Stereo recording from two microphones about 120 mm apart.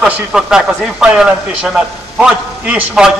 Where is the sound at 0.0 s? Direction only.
5° right (ahead or behind).